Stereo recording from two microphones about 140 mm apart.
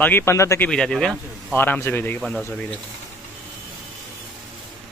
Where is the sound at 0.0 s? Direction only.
15° left (ahead or behind).